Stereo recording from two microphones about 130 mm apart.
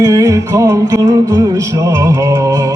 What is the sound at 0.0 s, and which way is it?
Music, 25° right (ahead or behind).